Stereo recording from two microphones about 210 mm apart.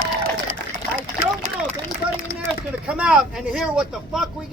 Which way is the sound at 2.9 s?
5° right (ahead or behind).